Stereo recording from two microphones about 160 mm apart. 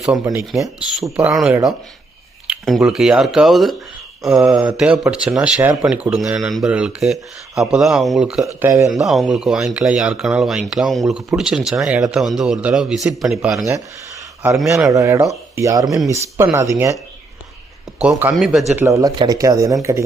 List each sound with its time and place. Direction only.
0.5 s speech: centre (ahead or behind)
8.6 s speech: 20° right (ahead or behind)
8.9 s speech: centre (ahead or behind)
14.8 s speech: 20° right (ahead or behind)
18.0 s speech: 5° right (ahead or behind)
18.8 s speech: 20° right (ahead or behind)